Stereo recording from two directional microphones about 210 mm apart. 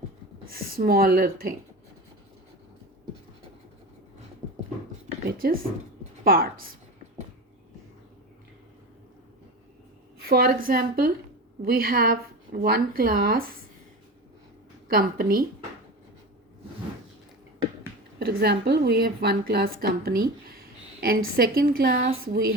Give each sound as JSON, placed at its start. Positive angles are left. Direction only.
{"t": 0.5, "sound": "a woman's voice", "side_deg": -45}
{"t": 5.3, "sound": "a woman's voice", "side_deg": -45}
{"t": 10.2, "sound": "a woman's voice", "side_deg": -45}
{"t": 14.8, "sound": "a woman's voice", "side_deg": -45}
{"t": 18.2, "sound": "a woman's voice", "side_deg": -50}